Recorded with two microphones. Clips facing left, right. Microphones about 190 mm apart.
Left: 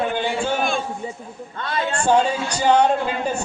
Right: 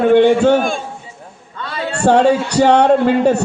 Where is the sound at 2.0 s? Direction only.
70° right (ahead or behind).